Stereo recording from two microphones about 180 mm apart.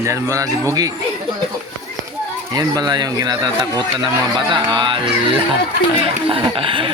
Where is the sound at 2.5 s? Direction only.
20° right (ahead or behind).